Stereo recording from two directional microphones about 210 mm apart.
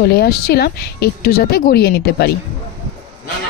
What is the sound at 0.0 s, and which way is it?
A woman's voice, 50° left (ahead or behind).